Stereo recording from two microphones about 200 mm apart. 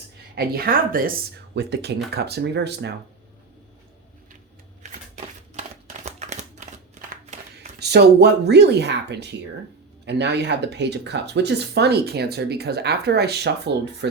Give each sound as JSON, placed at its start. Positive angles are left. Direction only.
{"t": 0.3, "sound": "speech", "side_deg": -50}
{"t": 4.8, "sound": "a sound", "side_deg": -35}
{"t": 7.5, "sound": "speech", "side_deg": -55}